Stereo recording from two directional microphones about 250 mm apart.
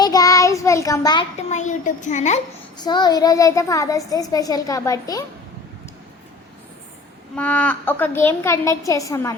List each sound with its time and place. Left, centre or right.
0.0 s child singing: centre
2.7 s child singing: centre
7.3 s child singing: centre